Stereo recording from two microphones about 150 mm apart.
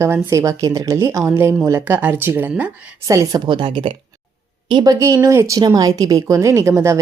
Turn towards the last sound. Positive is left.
turn(degrees=-20)  # may be behind; listen again after turning